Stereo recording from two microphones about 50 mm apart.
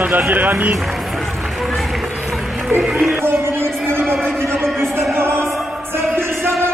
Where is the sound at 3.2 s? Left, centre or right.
Right.